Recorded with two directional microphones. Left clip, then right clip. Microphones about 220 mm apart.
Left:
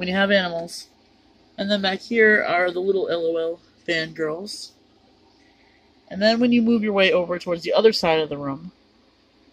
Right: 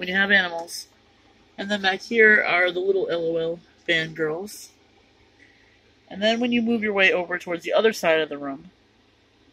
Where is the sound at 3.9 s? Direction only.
10° left (ahead or behind).